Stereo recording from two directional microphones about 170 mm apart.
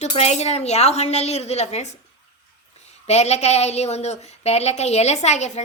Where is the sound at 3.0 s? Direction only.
40° left (ahead or behind).